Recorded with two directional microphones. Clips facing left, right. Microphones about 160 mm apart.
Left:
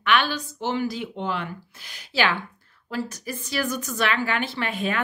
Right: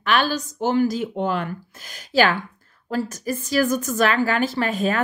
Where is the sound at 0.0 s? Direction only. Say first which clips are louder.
Right 2 dB; 40° right (ahead or behind).